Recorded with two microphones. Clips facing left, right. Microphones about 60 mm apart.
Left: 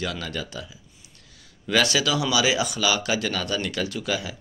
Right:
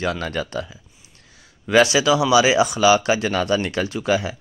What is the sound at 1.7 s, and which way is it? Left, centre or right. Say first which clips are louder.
Speech: right 7 dB; right.